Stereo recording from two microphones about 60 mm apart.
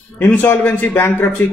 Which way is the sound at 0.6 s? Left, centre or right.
Left.